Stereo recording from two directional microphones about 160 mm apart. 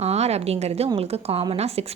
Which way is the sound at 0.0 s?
40° right (ahead or behind).